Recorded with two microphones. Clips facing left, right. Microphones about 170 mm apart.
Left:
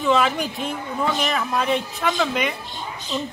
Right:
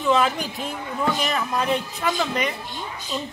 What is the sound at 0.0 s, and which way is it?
A woman's voice, centre (ahead or behind).